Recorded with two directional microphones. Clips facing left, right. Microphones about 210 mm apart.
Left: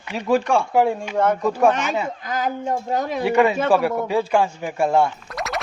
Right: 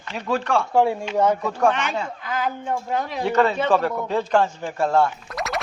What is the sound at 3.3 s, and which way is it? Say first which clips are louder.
Speech: left 2 dB; 10° left (ahead or behind).